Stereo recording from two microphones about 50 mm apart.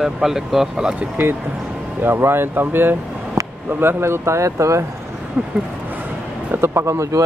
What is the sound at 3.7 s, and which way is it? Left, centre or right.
Speech, right.